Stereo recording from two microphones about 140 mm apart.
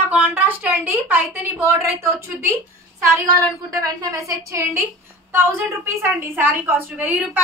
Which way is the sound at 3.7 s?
25° right (ahead or behind).